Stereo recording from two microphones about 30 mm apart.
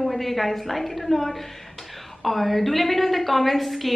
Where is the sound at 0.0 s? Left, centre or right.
Centre.